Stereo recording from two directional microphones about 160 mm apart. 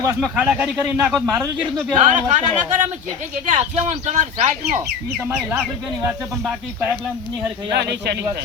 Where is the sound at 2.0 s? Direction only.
50° right (ahead or behind).